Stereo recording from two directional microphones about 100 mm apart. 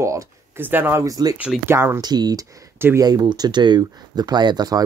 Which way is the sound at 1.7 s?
25° right (ahead or behind).